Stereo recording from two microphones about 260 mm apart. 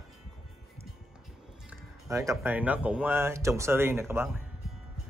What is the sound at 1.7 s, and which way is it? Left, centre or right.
Speech, centre.